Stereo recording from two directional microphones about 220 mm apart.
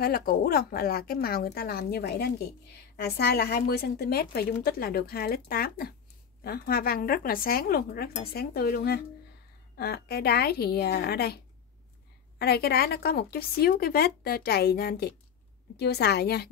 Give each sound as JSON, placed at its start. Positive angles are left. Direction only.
{"t": 0.0, "sound": "a woman's voice", "side_deg": 40}